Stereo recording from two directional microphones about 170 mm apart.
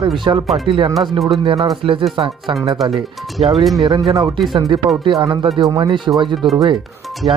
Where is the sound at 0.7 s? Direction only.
30° right (ahead or behind).